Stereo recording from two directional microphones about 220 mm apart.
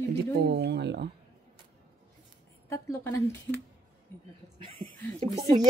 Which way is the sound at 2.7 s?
15° left (ahead or behind).